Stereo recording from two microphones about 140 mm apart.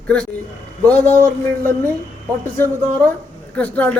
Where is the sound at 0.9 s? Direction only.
15° left (ahead or behind).